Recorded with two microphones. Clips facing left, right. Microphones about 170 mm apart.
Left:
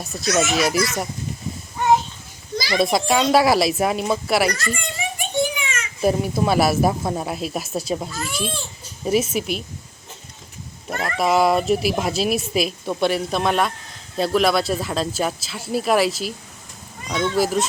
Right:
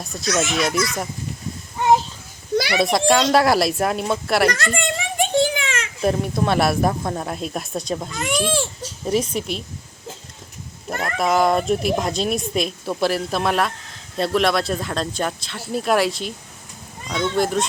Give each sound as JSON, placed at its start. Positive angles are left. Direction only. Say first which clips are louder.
{"t": 0.0, "sound": "speech", "louder": "left 2 dB", "side_deg": 0}
{"t": 2.7, "sound": "speech", "louder": "even", "side_deg": 0}
{"t": 4.8, "sound": "a sound", "louder": "right 6 dB", "side_deg": -85}
{"t": 6.0, "sound": "speech", "louder": "left 1 dB", "side_deg": 5}
{"t": 8.4, "sound": "speech", "louder": "right 6 dB", "side_deg": -90}
{"t": 9.0, "sound": "speech", "louder": "left 1 dB", "side_deg": 5}
{"t": 11.0, "sound": "speech", "louder": "left 1 dB", "side_deg": 5}